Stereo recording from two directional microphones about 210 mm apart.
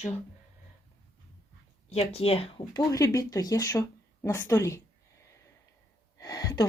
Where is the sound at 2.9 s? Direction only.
15° left (ahead or behind).